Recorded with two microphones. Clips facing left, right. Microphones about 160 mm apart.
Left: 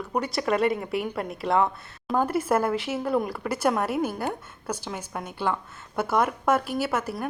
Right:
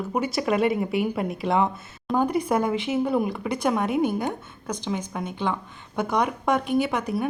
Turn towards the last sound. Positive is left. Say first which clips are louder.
# right 4 dB
turn(degrees=5)  # may be behind; listen again after turning